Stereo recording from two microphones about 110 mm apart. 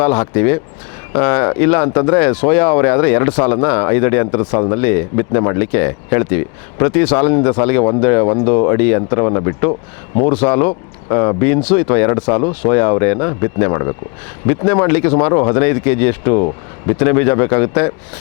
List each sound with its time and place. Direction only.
0.0 s speech: 25° left (ahead or behind)